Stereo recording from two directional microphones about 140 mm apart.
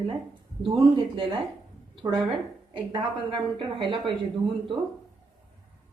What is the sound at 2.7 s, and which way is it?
A woman's voice, 35° right (ahead or behind).